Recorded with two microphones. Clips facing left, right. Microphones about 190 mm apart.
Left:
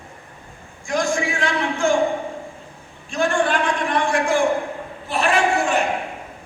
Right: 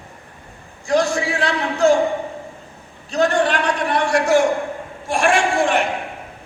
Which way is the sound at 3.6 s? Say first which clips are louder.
Right 1 dB; 70° right (ahead or behind).